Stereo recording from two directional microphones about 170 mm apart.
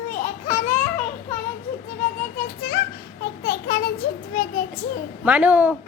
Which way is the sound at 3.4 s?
60° left (ahead or behind).